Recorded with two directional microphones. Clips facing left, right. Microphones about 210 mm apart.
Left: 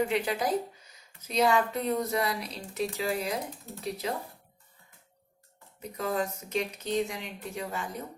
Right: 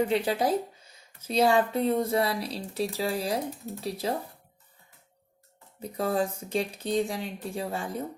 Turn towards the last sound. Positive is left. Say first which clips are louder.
# right 3 dB
turn(degrees=-30)  # may be behind; listen again after turning